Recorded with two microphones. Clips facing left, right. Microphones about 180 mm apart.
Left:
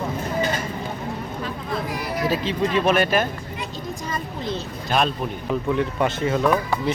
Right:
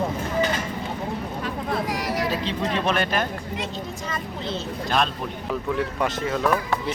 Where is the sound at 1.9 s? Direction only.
85° right.